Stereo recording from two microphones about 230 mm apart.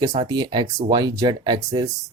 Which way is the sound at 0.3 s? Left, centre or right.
Centre.